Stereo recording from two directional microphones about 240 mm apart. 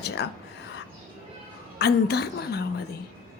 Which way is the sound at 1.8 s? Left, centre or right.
Left.